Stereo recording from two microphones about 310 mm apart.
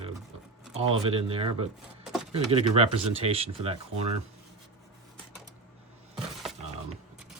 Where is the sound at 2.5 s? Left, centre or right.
Centre.